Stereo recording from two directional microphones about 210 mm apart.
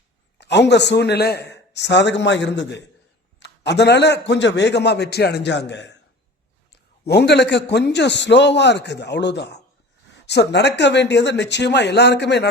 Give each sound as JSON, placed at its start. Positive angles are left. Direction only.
{"t": 0.3, "sound": "a man's voice", "side_deg": 55}
{"t": 7.1, "sound": "a man's voice", "side_deg": 55}